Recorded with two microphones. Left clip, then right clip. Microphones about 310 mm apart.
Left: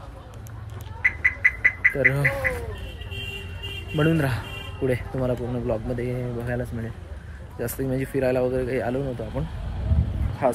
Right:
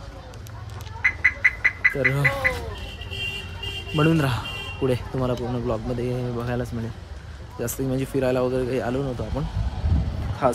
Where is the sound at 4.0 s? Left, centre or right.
Centre.